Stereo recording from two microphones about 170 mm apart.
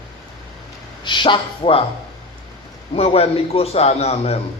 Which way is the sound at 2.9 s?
35° left (ahead or behind).